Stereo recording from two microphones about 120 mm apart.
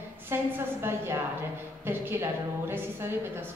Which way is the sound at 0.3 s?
20° right (ahead or behind).